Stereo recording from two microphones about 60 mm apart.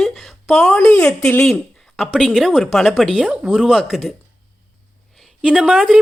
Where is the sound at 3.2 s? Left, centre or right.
Centre.